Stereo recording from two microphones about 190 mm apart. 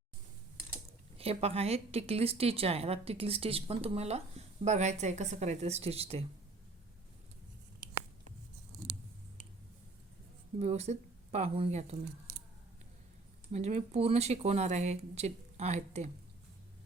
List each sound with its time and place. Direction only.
1.2 s a woman's voice: 30° right (ahead or behind)
10.6 s speech: 35° right (ahead or behind)
13.5 s a woman's voice: 35° right (ahead or behind)